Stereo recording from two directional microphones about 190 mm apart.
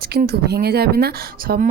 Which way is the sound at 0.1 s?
55° right (ahead or behind).